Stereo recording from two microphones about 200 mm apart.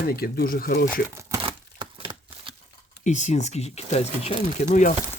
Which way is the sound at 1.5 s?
25° right (ahead or behind).